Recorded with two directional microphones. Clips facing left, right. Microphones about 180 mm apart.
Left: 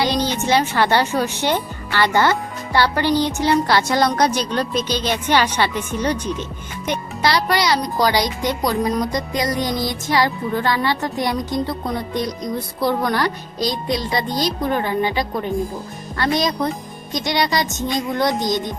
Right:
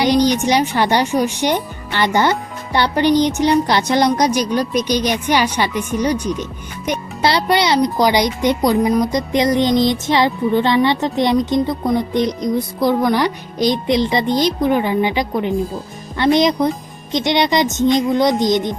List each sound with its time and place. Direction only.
0.0 s speech: 15° right (ahead or behind)
7.2 s speech: 25° right (ahead or behind)